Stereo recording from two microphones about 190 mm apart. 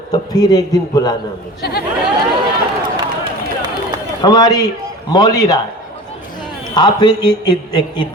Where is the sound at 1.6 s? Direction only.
55° left (ahead or behind).